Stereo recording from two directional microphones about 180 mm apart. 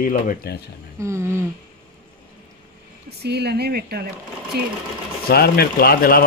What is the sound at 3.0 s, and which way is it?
Speech, 65° right (ahead or behind).